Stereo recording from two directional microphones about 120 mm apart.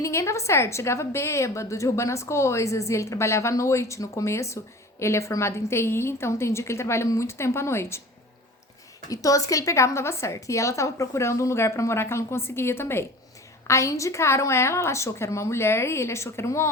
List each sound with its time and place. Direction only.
0.0 s a woman's voice: 25° left (ahead or behind)
9.0 s a woman's voice: 30° left (ahead or behind)